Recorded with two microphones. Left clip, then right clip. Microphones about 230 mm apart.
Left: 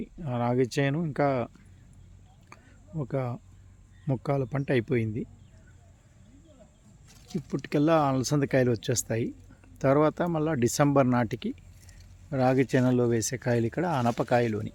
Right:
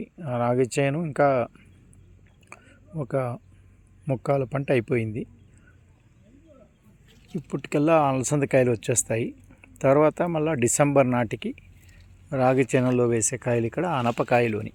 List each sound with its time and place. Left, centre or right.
0.0 s speech: centre
2.5 s a sound: centre
4.0 s speech: centre
7.5 s speech: centre